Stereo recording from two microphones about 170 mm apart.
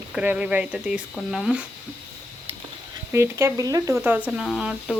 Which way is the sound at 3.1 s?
15° right (ahead or behind).